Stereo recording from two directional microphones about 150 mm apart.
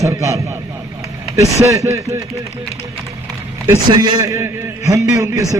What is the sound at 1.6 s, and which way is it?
Speech, 20° right (ahead or behind).